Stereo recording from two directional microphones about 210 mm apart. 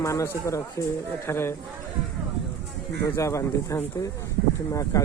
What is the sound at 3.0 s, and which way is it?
A man's voice, 15° left (ahead or behind).